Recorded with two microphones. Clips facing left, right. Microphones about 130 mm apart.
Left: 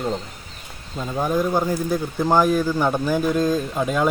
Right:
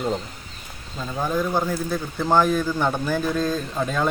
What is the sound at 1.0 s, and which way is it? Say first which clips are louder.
Speech: left 3 dB; 15° left (ahead or behind).